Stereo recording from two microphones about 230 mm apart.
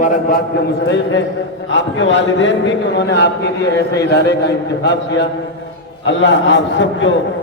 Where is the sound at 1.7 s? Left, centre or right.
Left.